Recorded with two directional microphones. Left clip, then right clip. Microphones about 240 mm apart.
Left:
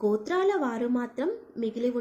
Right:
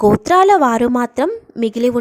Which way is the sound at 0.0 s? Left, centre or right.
Right.